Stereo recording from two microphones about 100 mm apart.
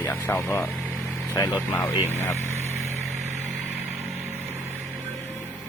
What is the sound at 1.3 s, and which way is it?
Speech, 35° left (ahead or behind).